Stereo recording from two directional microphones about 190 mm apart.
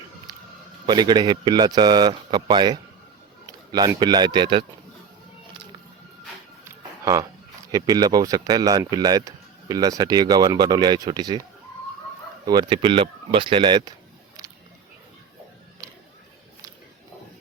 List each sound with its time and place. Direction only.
0.3 s a sound: 20° right (ahead or behind)
0.9 s speech: 25° right (ahead or behind)
6.7 s music: 15° right (ahead or behind)
7.7 s speech: 20° right (ahead or behind)
12.5 s speech: 25° right (ahead or behind)